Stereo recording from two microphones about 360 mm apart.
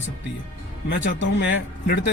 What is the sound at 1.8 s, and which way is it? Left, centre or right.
Speech, left.